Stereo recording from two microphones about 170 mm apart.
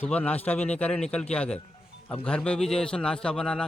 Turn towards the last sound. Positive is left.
turn(degrees=5)  # may be behind; listen again after turning